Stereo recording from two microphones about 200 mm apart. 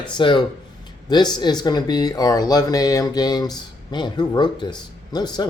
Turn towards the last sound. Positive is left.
turn(degrees=20)  # may be behind; listen again after turning